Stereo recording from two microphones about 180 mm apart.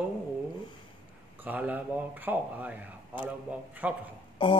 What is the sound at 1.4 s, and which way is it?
Speech, 10° right (ahead or behind).